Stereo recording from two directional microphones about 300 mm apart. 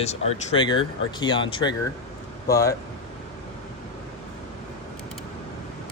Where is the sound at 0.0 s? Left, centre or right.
Centre.